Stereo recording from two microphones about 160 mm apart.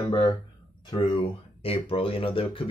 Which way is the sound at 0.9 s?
30° left (ahead or behind).